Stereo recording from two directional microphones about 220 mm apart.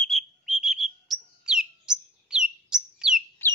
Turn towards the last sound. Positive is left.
turn(degrees=10)  # may be behind; listen again after turning